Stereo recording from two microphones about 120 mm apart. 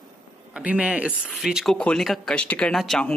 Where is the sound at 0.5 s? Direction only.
10° right (ahead or behind).